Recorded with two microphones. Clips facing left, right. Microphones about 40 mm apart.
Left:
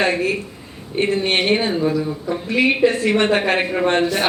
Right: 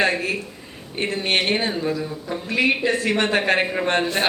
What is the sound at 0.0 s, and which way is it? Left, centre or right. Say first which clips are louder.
Speech: left 2 dB; centre.